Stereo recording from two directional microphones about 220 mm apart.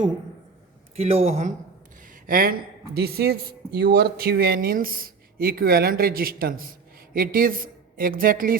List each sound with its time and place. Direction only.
0.9 s speech: 30° right (ahead or behind)
2.2 s speech: 40° right (ahead or behind)